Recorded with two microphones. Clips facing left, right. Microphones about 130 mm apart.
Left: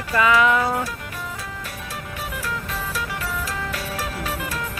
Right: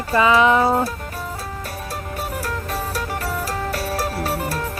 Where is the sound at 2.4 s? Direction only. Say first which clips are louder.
Right 3 dB; 40° right (ahead or behind).